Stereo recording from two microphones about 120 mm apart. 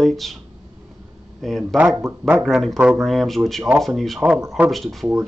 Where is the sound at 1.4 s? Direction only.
Centre (ahead or behind).